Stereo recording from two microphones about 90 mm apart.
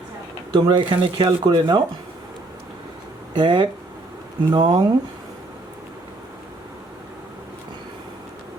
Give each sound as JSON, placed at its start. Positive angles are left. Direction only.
{"t": 0.5, "sound": "speech", "side_deg": -60}
{"t": 1.0, "sound": "speech", "side_deg": -90}
{"t": 1.5, "sound": "speech", "side_deg": -55}
{"t": 3.3, "sound": "speech", "side_deg": -65}
{"t": 4.4, "sound": "speech", "side_deg": -50}